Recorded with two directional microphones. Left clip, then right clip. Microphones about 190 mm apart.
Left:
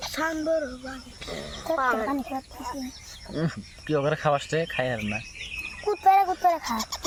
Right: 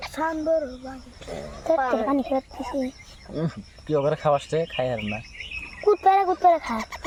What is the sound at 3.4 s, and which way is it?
Speech, centre (ahead or behind).